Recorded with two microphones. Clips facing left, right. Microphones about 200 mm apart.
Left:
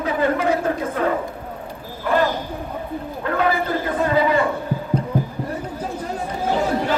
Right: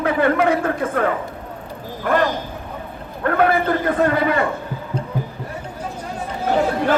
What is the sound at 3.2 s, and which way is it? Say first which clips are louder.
A man's voice: right 4 dB; 55° right (ahead or behind).